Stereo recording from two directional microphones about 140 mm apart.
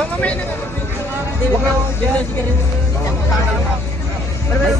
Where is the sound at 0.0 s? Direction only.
10° left (ahead or behind).